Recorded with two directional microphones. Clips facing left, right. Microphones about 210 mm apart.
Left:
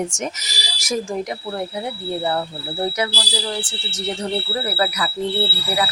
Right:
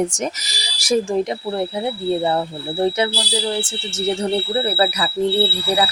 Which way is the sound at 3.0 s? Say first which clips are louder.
Right 4 dB; 25° right (ahead or behind).